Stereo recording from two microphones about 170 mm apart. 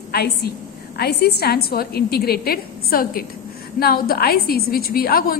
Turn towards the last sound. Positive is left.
turn(degrees=60)  # may be behind; listen again after turning